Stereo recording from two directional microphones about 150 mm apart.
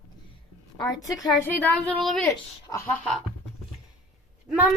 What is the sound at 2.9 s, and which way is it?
Speech, centre (ahead or behind).